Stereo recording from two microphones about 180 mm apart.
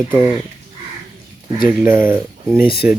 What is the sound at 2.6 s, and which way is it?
Speech, 60° left (ahead or behind).